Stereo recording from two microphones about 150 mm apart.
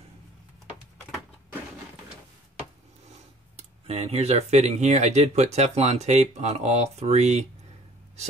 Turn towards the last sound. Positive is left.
turn(degrees=-50)  # may be behind; listen again after turning